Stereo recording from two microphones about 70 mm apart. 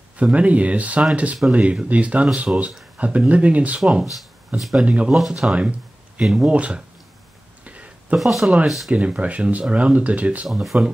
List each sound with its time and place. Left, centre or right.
0.2 s speech: centre
4.6 s speech: centre
4.8 s speech: centre
6.2 s speech: centre
7.6 s a sound: centre
8.2 s speech: centre
8.9 s speech: centre
10.5 s speech: centre